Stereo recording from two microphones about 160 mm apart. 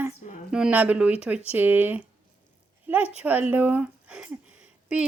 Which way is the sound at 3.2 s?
10° right (ahead or behind).